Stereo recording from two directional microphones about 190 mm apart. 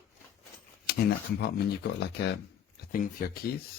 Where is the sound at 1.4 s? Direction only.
60° left (ahead or behind).